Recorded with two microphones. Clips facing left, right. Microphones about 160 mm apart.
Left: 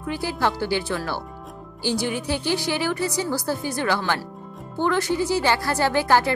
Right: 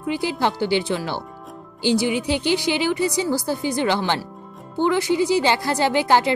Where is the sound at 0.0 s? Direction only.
20° right (ahead or behind).